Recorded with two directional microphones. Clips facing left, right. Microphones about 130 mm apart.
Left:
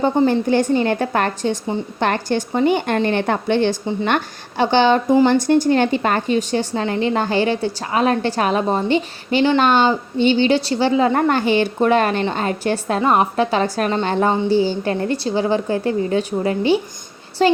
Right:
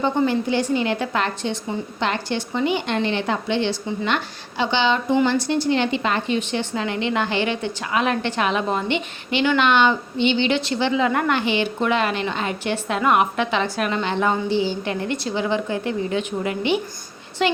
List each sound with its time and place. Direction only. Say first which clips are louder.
0.3 s a woman's voice: left 5 dB; 50° left (ahead or behind)